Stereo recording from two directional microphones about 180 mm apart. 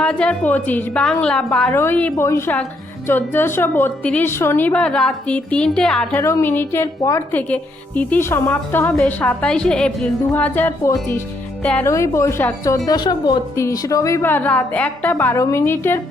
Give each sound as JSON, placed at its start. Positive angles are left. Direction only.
{"t": 0.0, "sound": "a woman's voice", "side_deg": 5}
{"t": 6.1, "sound": "a woman's voice", "side_deg": 15}